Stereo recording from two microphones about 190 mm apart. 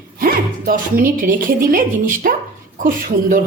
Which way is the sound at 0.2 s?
50° right (ahead or behind).